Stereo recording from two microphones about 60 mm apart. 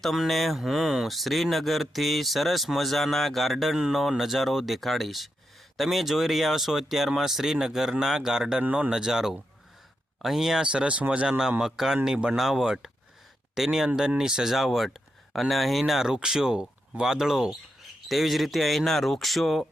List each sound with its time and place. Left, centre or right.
0.0 s speech: centre
8.6 s speech: right
8.9 s speech: centre